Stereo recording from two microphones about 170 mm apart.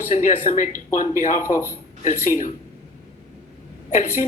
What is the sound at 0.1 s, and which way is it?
Speech, 50° left (ahead or behind).